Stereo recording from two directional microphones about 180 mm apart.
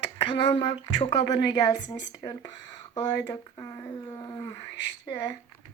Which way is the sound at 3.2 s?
20° left (ahead or behind).